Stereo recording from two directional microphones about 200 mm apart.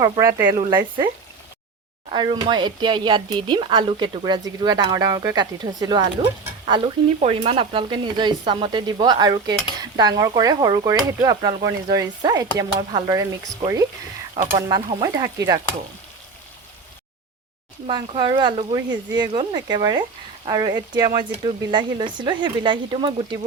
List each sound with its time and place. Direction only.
0.0 s speech: 15° right (ahead or behind)
14.4 s speech: 20° right (ahead or behind)
14.7 s stir: 20° right (ahead or behind)
17.8 s speech: 25° right (ahead or behind)